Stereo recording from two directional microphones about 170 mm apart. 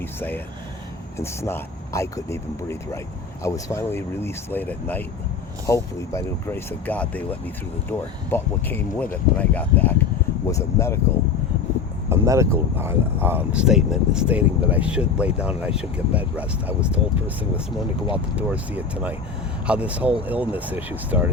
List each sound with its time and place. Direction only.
0.0 s speech: 15° left (ahead or behind)
12.0 s speech: 15° right (ahead or behind)